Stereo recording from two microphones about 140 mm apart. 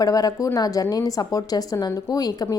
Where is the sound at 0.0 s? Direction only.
25° left (ahead or behind).